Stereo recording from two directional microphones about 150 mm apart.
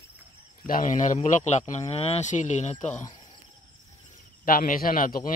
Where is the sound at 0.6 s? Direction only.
65° left (ahead or behind).